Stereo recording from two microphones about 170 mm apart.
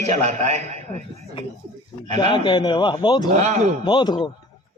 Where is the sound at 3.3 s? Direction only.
45° right (ahead or behind).